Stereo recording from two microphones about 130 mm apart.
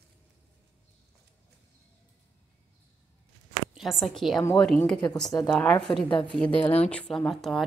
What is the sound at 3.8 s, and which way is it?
A woman's voice, centre (ahead or behind).